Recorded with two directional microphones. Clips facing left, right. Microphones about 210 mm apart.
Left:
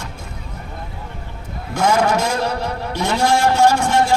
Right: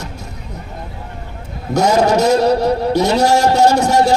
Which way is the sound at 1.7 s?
40° right (ahead or behind).